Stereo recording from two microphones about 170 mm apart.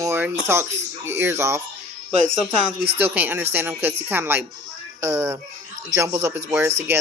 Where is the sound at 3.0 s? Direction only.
10° right (ahead or behind).